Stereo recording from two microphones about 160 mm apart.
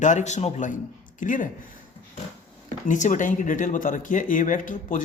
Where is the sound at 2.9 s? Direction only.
50° left (ahead or behind).